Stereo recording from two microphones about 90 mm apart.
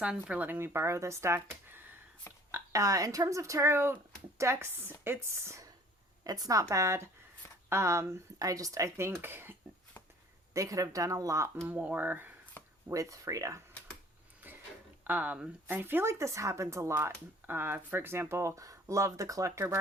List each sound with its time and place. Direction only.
0.0 s speech: 10° right (ahead or behind)
0.4 s speech: 25° right (ahead or behind)
2.5 s speech: 40° right (ahead or behind)
6.2 s speech: 45° right (ahead or behind); by 9.6 s 25° right (ahead or behind)
10.5 s speech: 35° right (ahead or behind)
11.7 s speech: 20° right (ahead or behind)
12.6 s a sound: 20° left (ahead or behind)
12.9 s speech: 40° right (ahead or behind)
14.4 s a sound: 20° right (ahead or behind)
15.0 s speech: 20° right (ahead or behind)
16.9 s speech: 25° right (ahead or behind)